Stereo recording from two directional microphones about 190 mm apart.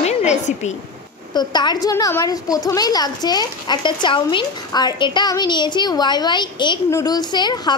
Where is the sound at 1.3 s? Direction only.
20° left (ahead or behind).